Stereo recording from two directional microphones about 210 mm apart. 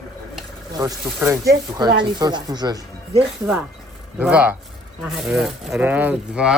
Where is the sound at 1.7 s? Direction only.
20° right (ahead or behind).